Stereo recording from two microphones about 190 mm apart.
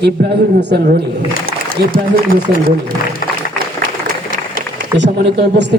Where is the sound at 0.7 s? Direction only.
60° right (ahead or behind).